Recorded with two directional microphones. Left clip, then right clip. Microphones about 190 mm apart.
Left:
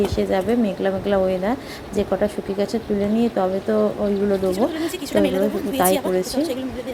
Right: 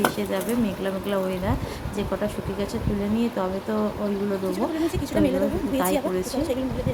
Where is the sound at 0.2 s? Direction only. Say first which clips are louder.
Left 6 dB; 25° left (ahead or behind).